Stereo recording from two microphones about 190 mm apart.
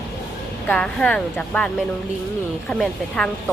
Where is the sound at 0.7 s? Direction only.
5° left (ahead or behind).